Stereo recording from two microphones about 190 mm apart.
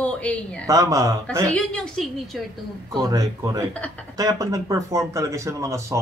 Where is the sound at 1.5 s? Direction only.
5° left (ahead or behind).